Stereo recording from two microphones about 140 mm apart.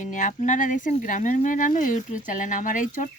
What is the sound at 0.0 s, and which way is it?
A woman's voice, 65° left (ahead or behind).